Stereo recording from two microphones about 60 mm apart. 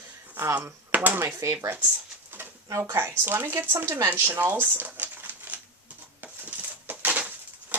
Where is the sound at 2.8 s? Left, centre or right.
Right.